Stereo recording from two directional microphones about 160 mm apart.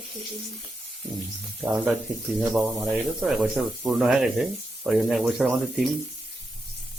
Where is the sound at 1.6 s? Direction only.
10° right (ahead or behind).